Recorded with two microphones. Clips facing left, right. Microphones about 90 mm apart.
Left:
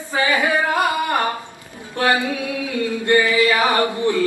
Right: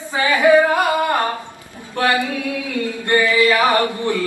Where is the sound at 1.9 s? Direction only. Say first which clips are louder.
Right 1 dB; 20° left (ahead or behind).